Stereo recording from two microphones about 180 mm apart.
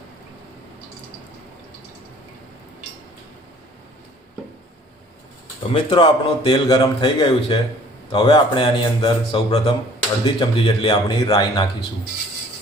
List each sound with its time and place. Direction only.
5.7 s a man's voice: 25° left (ahead or behind)